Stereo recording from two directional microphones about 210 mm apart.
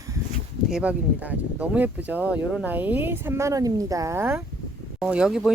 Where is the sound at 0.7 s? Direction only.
5° right (ahead or behind).